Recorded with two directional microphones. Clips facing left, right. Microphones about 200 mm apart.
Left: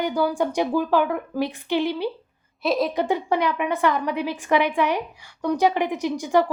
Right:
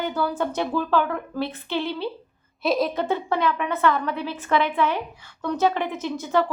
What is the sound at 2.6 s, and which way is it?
Speech, centre (ahead or behind).